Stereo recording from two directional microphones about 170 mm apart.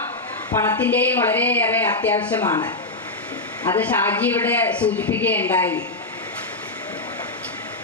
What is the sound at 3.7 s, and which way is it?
A man's voice, 10° left (ahead or behind).